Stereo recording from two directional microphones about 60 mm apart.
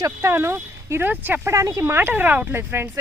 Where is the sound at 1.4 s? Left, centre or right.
Right.